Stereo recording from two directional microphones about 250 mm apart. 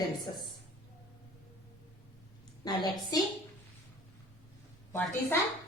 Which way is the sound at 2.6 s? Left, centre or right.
Centre.